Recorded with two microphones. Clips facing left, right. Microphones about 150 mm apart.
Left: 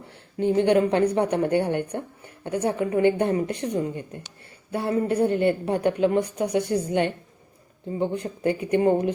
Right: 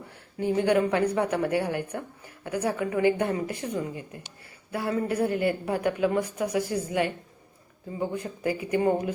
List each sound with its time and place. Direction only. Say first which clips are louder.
0.3 s a woman's voice: left 4 dB; 25° left (ahead or behind)
4.7 s a woman's voice: left 4 dB; 30° left (ahead or behind)